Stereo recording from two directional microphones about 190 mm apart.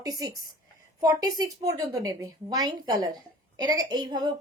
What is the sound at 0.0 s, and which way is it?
A woman's voice, 20° right (ahead or behind).